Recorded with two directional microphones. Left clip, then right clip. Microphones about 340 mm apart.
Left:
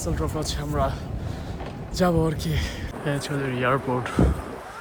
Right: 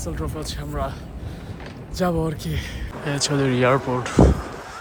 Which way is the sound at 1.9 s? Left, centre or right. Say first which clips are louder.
Left 1 dB; centre.